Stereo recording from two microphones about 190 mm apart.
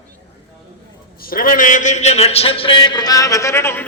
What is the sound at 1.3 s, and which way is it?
A man's voice, 50° left (ahead or behind).